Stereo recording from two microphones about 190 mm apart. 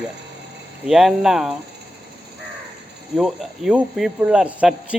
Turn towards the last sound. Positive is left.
turn(degrees=-5)  # may be behind; listen again after turning